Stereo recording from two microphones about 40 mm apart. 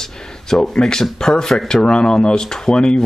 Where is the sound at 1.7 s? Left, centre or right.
Left.